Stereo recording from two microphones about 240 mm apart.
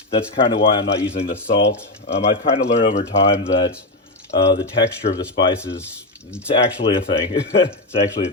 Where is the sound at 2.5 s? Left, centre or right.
Left.